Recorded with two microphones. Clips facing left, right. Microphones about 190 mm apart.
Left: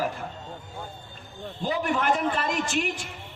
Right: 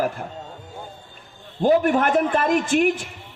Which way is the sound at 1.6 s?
50° right (ahead or behind).